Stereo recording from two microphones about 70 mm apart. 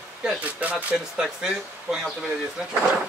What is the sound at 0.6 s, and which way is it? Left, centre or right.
Speech, right.